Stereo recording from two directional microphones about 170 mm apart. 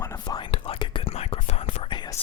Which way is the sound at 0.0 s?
20° left (ahead or behind).